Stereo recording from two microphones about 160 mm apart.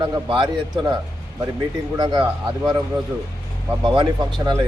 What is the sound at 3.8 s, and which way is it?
Speech, 30° right (ahead or behind).